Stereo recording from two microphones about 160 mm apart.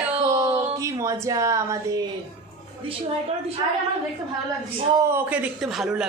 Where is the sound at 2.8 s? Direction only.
35° right (ahead or behind).